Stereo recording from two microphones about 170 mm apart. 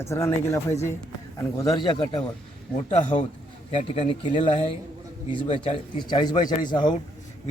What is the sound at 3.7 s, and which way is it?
A man's voice, 35° left (ahead or behind).